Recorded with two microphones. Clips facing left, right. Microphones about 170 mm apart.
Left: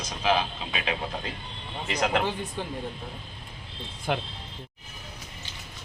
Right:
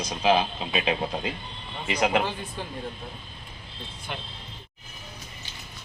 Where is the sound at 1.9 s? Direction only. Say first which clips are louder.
Right 2 dB; 10° right (ahead or behind).